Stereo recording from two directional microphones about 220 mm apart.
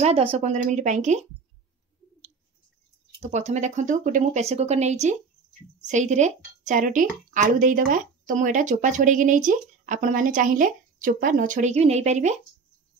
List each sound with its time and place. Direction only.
0.0 s a woman's voice: 25° right (ahead or behind)
3.2 s a woman's voice: 30° right (ahead or behind)